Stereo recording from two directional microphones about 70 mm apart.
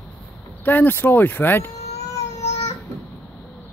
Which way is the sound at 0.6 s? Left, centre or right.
Left.